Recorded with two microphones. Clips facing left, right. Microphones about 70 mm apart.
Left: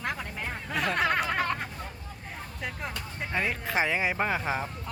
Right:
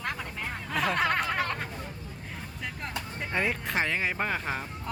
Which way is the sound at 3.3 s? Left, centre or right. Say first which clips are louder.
Even; centre.